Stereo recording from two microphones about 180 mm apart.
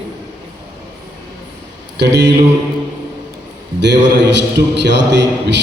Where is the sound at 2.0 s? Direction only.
70° right (ahead or behind).